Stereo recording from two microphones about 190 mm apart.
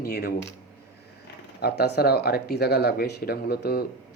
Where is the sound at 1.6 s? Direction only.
55° left (ahead or behind).